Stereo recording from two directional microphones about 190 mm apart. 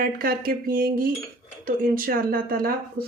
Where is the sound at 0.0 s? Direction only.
50° right (ahead or behind).